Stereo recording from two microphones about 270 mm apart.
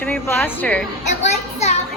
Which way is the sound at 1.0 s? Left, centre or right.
Left.